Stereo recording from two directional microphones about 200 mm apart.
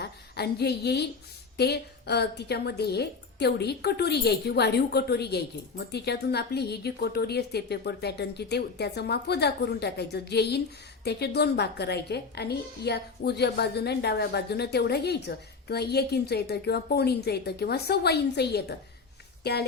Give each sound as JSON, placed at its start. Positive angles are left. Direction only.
{"t": 0.0, "sound": "a woman's voice", "side_deg": 55}